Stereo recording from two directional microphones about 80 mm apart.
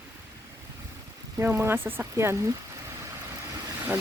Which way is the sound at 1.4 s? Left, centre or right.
Right.